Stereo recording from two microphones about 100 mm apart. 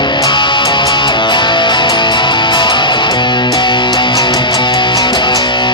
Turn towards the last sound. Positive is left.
turn(degrees=50)  # may be behind; listen again after turning